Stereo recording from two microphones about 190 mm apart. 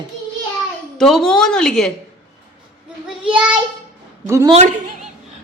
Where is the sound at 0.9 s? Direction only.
Centre (ahead or behind).